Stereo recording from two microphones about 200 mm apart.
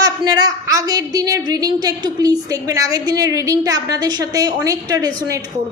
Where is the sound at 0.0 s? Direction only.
20° right (ahead or behind).